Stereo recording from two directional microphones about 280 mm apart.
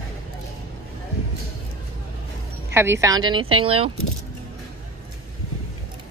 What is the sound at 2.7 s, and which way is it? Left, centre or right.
Speech, centre.